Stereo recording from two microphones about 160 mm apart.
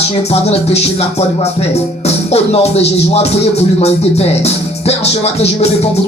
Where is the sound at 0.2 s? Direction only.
40° left (ahead or behind).